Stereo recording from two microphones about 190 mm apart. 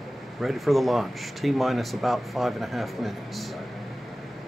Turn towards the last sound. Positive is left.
turn(degrees=0)  # may be behind; listen again after turning